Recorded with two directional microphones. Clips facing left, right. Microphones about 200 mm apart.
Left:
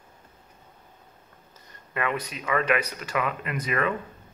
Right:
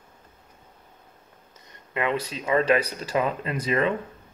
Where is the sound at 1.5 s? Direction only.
20° right (ahead or behind).